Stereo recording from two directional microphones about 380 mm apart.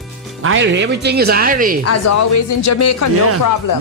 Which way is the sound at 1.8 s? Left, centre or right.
Left.